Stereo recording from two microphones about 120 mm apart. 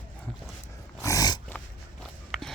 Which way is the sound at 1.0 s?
30° left (ahead or behind).